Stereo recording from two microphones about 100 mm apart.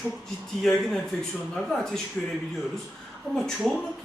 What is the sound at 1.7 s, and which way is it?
Speech, centre (ahead or behind).